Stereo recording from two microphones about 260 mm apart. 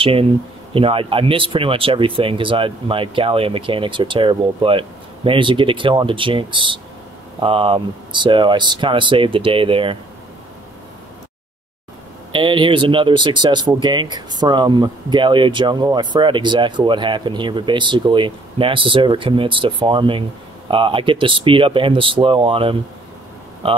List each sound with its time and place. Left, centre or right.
0.0 s speech: right
12.3 s speech: centre